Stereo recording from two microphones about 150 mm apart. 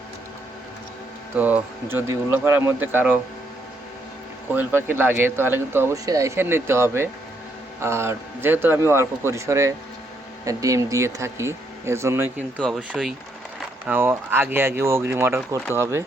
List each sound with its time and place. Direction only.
1.4 s speech: 10° right (ahead or behind)
4.5 s speech: 15° right (ahead or behind)
12.5 s speech: 5° left (ahead or behind)
13.8 s speech: 15° right (ahead or behind)